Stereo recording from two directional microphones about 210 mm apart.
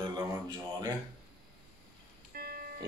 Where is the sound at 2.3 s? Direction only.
45° right (ahead or behind).